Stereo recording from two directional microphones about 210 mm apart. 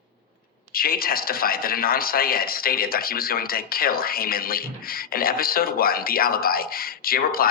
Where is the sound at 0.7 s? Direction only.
45° left (ahead or behind).